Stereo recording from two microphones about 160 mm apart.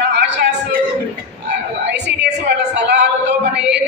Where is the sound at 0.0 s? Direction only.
90° right.